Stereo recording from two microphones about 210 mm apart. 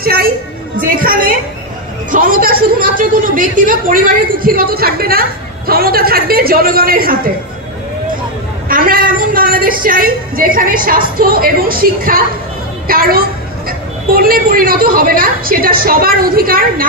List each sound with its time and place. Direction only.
0.0 s a sound: 45° right (ahead or behind)
0.7 s a woman's voice: 45° right (ahead or behind)
8.6 s a woman's voice: 45° right (ahead or behind)